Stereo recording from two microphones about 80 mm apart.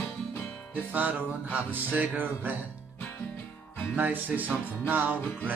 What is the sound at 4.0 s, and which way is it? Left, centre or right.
Music, right.